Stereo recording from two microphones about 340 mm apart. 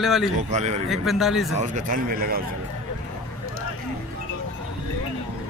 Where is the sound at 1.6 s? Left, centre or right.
Right.